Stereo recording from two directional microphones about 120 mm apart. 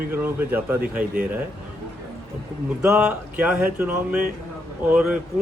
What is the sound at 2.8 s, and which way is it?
A man's voice, 10° right (ahead or behind).